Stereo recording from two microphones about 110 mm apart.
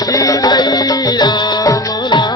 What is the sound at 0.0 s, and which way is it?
Music, 35° left (ahead or behind).